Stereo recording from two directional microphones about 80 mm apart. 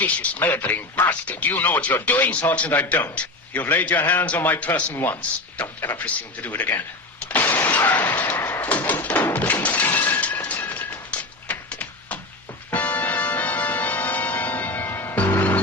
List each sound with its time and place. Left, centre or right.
0.0 s speech: left
7.3 s a sound: left
12.7 s music: centre